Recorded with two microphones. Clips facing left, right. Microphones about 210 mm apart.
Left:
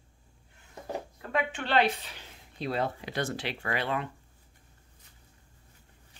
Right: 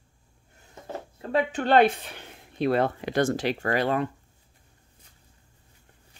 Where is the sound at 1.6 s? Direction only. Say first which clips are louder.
Right 8 dB; 50° right (ahead or behind).